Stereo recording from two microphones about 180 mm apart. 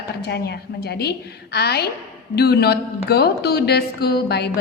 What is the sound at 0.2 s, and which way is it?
A woman's voice, 65° left (ahead or behind).